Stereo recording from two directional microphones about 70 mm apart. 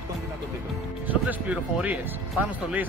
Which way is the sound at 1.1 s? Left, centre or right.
Right.